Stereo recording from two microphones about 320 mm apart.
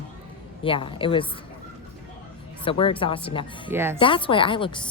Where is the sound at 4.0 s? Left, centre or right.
Centre.